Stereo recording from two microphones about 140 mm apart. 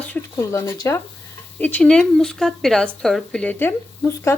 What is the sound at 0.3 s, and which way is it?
Speech, 25° left (ahead or behind).